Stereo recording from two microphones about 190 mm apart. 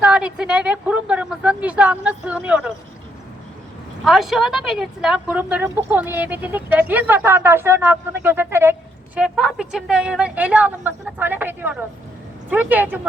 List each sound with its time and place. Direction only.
0.0 s a sound: 5° right (ahead or behind)
0.3 s speech: 5° right (ahead or behind)
4.0 s a woman's voice: centre (ahead or behind)